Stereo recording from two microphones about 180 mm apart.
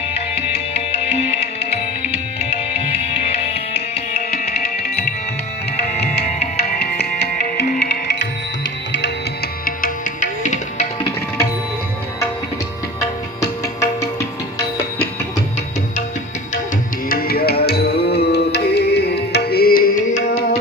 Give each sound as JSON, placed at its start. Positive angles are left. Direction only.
{"t": 0.9, "sound": "music", "side_deg": 35}
{"t": 3.2, "sound": "music", "side_deg": 35}
{"t": 5.9, "sound": "music", "side_deg": 35}
{"t": 6.7, "sound": "music", "side_deg": 60}
{"t": 9.6, "sound": "music", "side_deg": 50}
{"t": 17.1, "sound": "music", "side_deg": 55}